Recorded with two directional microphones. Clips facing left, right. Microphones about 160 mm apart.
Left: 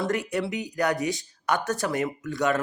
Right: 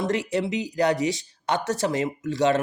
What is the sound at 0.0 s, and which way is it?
Speech, 25° right (ahead or behind).